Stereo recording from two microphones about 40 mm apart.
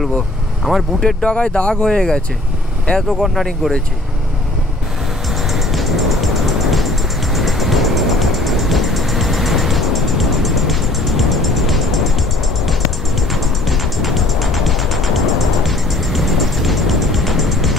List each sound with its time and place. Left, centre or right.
0.7 s speech: centre
1.2 s speech: left
3.1 s speech: centre
5.5 s music: centre
13.3 s music: centre